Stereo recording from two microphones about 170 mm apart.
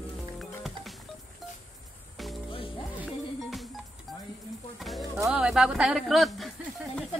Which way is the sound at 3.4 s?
Centre (ahead or behind).